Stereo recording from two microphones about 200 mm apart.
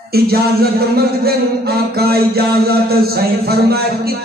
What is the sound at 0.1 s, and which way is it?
Speech, 50° right (ahead or behind).